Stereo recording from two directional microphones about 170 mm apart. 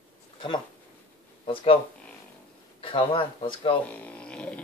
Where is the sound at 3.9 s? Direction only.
10° left (ahead or behind).